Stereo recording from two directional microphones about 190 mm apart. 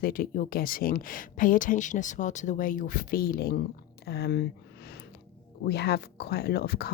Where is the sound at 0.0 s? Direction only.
50° left (ahead or behind).